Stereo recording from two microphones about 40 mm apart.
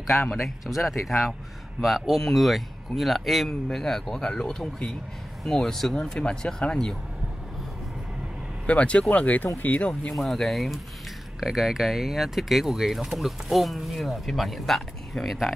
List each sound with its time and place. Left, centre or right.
0.7 s speech: centre
3.4 s speech: centre
8.6 s speech: left
10.1 s speech: centre